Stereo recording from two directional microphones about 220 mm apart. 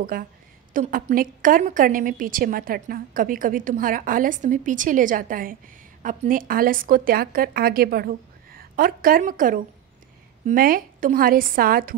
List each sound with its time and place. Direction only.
0.1 s a woman's voice: 40° right (ahead or behind)